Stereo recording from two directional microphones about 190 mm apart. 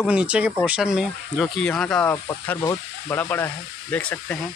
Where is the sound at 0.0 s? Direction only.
5° right (ahead or behind).